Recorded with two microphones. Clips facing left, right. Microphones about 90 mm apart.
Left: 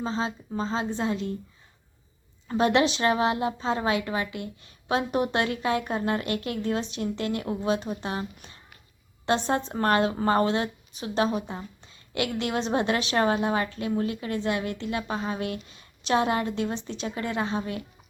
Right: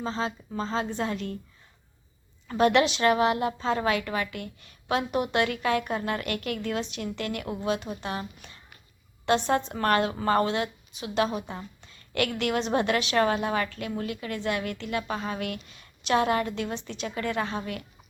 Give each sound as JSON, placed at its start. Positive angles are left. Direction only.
{"t": 0.0, "sound": "a woman's voice", "side_deg": 25}
{"t": 2.5, "sound": "a woman's voice", "side_deg": 25}